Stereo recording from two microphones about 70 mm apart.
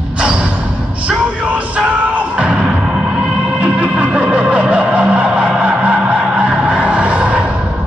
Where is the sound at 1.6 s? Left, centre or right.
Centre.